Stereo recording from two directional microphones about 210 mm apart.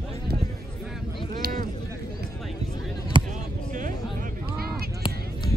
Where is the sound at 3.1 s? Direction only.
20° right (ahead or behind).